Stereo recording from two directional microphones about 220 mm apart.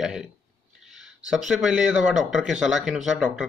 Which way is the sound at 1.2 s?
5° right (ahead or behind).